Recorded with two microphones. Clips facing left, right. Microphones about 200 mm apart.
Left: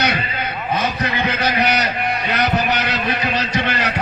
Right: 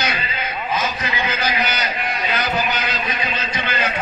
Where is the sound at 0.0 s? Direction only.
60° left (ahead or behind).